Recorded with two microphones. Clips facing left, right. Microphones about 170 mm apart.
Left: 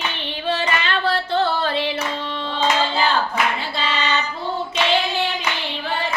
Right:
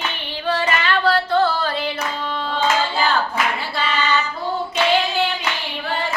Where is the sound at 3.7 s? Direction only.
20° left (ahead or behind).